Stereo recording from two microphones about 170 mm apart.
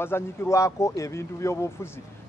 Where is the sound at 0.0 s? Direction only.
15° left (ahead or behind).